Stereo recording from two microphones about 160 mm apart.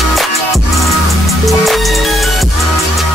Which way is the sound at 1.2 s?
Centre (ahead or behind).